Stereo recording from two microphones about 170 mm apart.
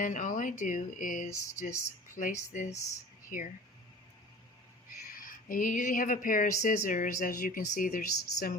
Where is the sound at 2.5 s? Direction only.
50° left (ahead or behind).